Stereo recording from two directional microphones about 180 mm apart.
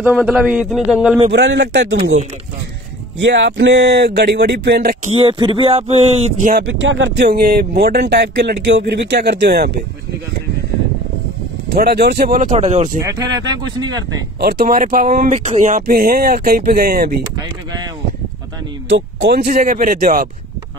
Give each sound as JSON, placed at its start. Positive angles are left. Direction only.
{"t": 0.0, "sound": "a man's voice", "side_deg": -5}
{"t": 1.3, "sound": "speech", "side_deg": -80}
{"t": 3.2, "sound": "speech", "side_deg": -75}
{"t": 5.0, "sound": "speech", "side_deg": -30}
{"t": 6.6, "sound": "speech", "side_deg": -90}
{"t": 7.2, "sound": "speech", "side_deg": -55}
{"t": 11.7, "sound": "speech", "side_deg": -60}
{"t": 13.0, "sound": "speech", "side_deg": -20}
{"t": 14.4, "sound": "speech", "side_deg": -55}
{"t": 18.9, "sound": "speech", "side_deg": -85}